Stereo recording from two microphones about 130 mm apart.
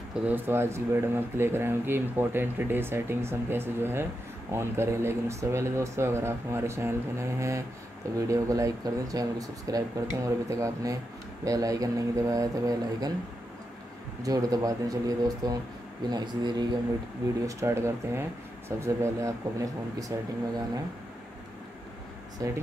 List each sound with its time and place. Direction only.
0.1 s speech: 10° right (ahead or behind); by 13.1 s 25° right (ahead or behind)
14.2 s speech: 30° right (ahead or behind)
17.5 s speech: 20° right (ahead or behind)
22.4 s speech: 25° right (ahead or behind)